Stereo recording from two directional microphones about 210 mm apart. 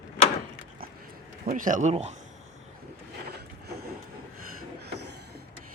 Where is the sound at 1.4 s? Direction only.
40° right (ahead or behind).